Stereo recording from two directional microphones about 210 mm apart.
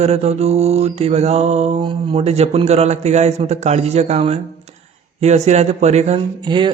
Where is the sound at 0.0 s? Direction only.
30° right (ahead or behind).